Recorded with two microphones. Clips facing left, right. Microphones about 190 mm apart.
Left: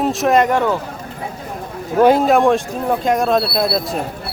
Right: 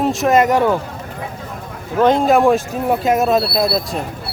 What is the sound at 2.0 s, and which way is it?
Speech, 5° left (ahead or behind).